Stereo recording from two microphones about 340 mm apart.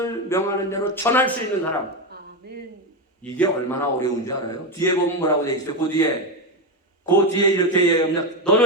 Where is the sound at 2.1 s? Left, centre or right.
Right.